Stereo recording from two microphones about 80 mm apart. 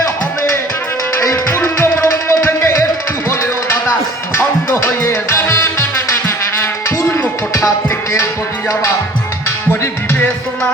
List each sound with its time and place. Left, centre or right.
1.1 s music: left